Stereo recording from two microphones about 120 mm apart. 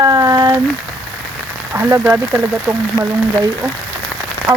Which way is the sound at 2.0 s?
20° right (ahead or behind).